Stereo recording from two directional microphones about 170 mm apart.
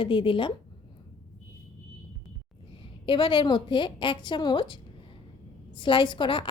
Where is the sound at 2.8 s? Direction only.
30° left (ahead or behind).